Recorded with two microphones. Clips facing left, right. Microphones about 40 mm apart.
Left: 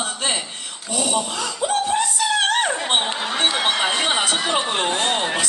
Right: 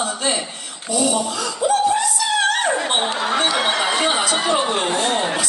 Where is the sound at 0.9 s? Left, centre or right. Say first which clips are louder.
Right 3 dB; left.